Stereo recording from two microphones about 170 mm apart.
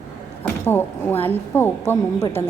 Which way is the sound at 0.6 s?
10° left (ahead or behind).